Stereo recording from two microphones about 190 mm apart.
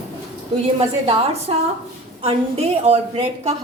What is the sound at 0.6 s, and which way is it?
A woman's voice, 30° right (ahead or behind).